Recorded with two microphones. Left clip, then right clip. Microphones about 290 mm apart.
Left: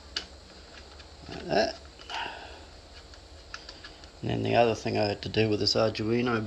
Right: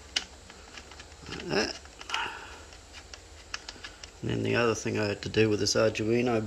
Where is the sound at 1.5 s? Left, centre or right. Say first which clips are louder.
Left 4 dB; centre.